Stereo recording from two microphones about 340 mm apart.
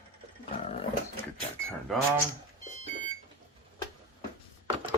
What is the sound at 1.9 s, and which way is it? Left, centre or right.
Speech, centre.